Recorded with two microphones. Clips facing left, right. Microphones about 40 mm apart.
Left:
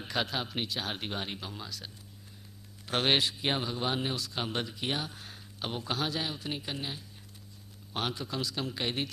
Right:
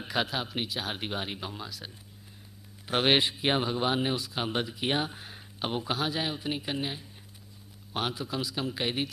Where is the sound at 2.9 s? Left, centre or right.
Centre.